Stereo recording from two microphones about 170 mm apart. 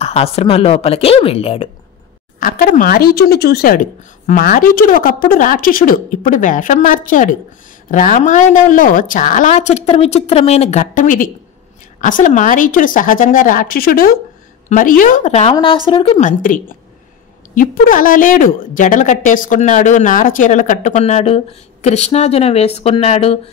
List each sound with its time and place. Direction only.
0.0 s a woman's voice: 35° left (ahead or behind)
2.4 s a woman's voice: 55° left (ahead or behind)
15.5 s a woman's voice: 30° left (ahead or behind)
16.2 s a woman's voice: 50° left (ahead or behind)